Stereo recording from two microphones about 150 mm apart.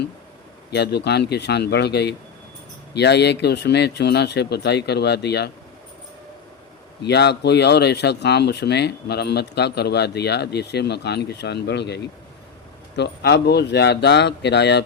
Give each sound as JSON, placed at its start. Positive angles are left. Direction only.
{"t": 0.7, "sound": "speech", "side_deg": 90}
{"t": 7.0, "sound": "speech", "side_deg": 90}